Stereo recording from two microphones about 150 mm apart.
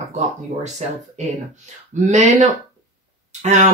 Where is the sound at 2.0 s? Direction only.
55° right (ahead or behind).